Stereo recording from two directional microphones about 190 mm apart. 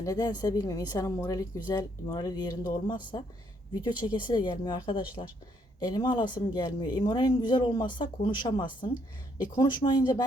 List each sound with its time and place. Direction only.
0.0 s speech: 20° left (ahead or behind)